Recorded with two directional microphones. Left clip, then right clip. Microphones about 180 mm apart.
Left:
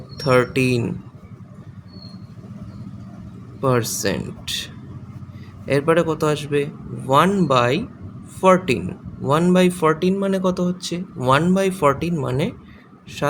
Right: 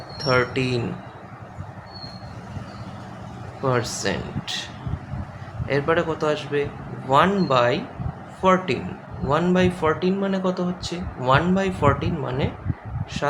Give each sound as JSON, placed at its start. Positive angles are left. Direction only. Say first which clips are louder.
{"t": 0.2, "sound": "speech", "louder": "left 4 dB", "side_deg": 45}
{"t": 3.6, "sound": "speech", "louder": "left 3 dB", "side_deg": 45}